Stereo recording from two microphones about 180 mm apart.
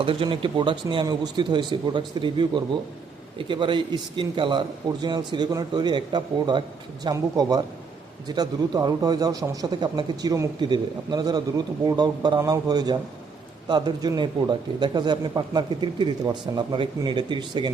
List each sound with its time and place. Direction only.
0.0 s speech: 30° right (ahead or behind)